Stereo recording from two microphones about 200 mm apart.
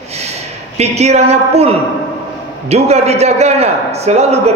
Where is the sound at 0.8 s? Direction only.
35° right (ahead or behind).